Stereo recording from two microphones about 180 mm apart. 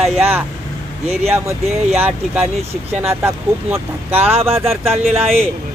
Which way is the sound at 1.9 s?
10° right (ahead or behind).